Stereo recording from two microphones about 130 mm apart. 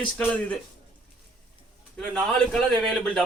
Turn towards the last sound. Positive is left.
turn(degrees=5)  # may be behind; listen again after turning